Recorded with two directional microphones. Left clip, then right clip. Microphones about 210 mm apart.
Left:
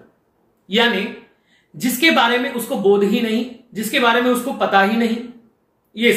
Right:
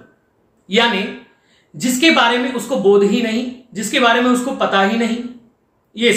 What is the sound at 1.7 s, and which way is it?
A man's voice, 15° right (ahead or behind).